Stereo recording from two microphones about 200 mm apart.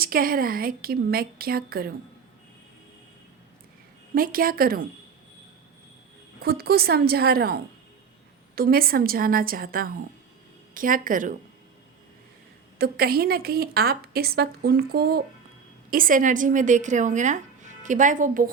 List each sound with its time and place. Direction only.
0.0 s a woman's voice: 45° right (ahead or behind)
4.1 s a woman's voice: 45° right (ahead or behind)
6.4 s a woman's voice: 50° right (ahead or behind)
12.8 s a woman's voice: 50° right (ahead or behind)